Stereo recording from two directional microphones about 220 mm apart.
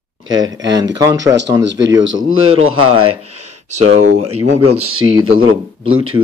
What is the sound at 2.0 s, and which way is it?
Speech, 65° right (ahead or behind).